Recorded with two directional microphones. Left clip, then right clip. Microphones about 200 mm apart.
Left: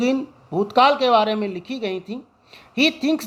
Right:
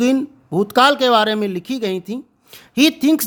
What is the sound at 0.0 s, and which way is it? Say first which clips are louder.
Speech: right 4 dB; 45° right (ahead or behind).